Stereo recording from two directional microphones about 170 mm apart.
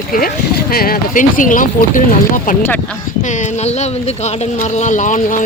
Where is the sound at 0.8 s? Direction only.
50° left (ahead or behind).